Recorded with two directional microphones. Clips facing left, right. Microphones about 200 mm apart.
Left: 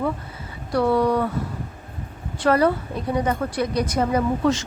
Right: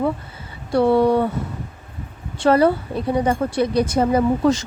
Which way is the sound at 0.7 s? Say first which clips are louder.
Right 4 dB; 25° right (ahead or behind).